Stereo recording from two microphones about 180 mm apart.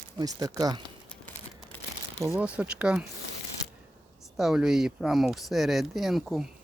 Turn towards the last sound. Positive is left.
turn(degrees=0)  # may be behind; listen again after turning